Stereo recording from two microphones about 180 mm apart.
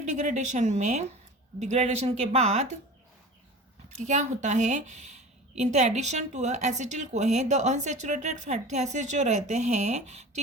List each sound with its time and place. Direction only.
0.0 s a woman's voice: 40° right (ahead or behind)
3.9 s a woman's voice: 40° right (ahead or behind)